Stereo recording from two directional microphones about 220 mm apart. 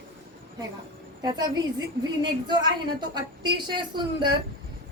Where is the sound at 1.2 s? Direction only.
20° right (ahead or behind).